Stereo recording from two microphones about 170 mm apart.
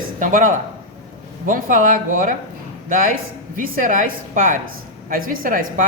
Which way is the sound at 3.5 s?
50° right (ahead or behind).